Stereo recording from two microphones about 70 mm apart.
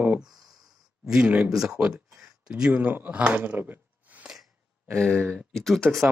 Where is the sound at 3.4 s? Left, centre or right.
Right.